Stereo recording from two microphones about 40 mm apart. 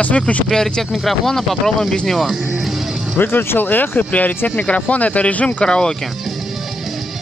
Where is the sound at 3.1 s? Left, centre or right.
Left.